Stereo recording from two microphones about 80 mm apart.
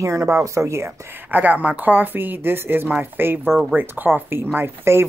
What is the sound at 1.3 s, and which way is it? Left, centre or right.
Speech, right.